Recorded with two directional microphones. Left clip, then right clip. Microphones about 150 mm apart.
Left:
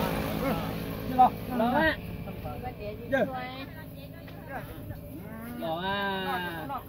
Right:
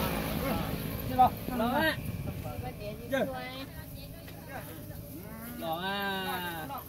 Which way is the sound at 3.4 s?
30° right (ahead or behind).